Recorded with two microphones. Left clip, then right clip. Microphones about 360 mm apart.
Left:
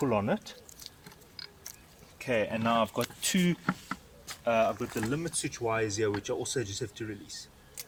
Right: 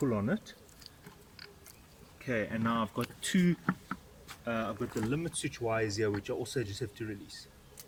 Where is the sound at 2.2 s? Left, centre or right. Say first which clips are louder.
Left 5 dB; centre.